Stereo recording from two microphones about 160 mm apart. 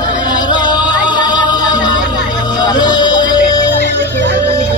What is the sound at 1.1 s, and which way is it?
Music, 25° left (ahead or behind).